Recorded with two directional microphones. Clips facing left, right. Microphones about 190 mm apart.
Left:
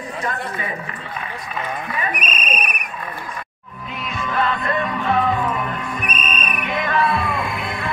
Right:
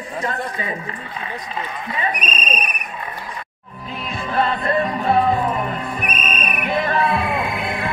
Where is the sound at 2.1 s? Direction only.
10° left (ahead or behind).